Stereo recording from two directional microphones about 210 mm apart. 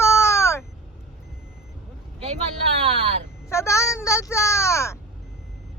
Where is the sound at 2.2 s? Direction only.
30° right (ahead or behind).